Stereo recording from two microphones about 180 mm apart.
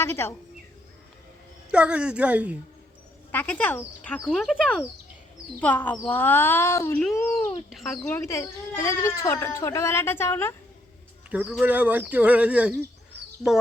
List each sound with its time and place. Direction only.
0.0 s speech: 15° left (ahead or behind)
1.7 s speech: 5° right (ahead or behind)
3.3 s speech: 10° left (ahead or behind)
7.7 s speech: centre (ahead or behind)
8.0 s speech: 15° left (ahead or behind)
11.3 s speech: 5° right (ahead or behind)